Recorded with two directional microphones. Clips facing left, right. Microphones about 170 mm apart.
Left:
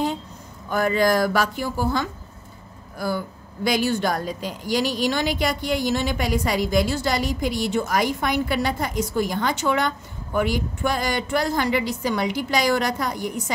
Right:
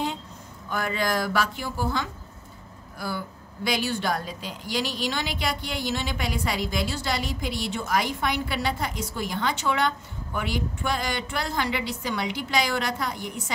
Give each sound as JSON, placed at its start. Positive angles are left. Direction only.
{"t": 0.7, "sound": "a woman's voice", "side_deg": 40}